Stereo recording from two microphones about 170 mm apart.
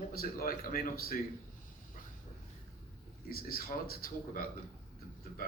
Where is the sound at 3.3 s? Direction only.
60° left (ahead or behind).